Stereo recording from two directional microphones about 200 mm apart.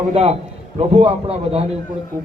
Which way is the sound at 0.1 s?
30° right (ahead or behind).